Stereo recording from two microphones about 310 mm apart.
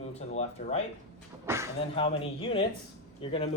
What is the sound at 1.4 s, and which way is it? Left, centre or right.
Speech, centre.